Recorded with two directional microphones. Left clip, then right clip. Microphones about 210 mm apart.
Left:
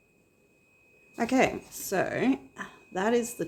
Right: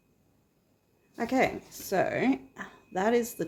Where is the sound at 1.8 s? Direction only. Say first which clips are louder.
Right 1 dB; centre (ahead or behind).